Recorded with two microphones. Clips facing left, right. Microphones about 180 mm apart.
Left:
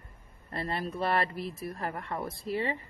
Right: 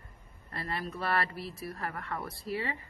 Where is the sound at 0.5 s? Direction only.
20° left (ahead or behind).